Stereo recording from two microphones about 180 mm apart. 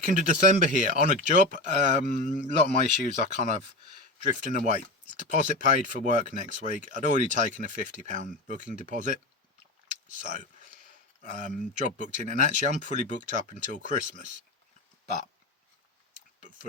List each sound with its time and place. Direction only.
0.0 s speech: 45° right (ahead or behind)